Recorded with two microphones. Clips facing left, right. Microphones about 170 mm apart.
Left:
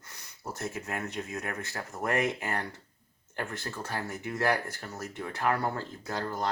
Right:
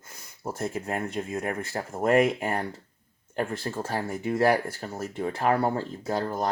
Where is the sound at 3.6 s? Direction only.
30° right (ahead or behind).